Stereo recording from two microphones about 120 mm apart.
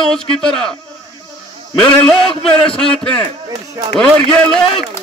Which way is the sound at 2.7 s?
50° left (ahead or behind).